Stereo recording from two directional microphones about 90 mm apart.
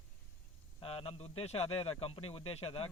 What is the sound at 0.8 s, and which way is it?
A man's voice, 90° left.